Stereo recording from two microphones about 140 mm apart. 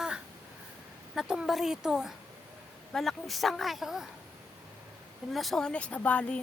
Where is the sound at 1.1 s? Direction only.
5° right (ahead or behind).